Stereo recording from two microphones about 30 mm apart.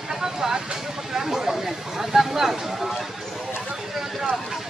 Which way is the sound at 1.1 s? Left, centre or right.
Centre.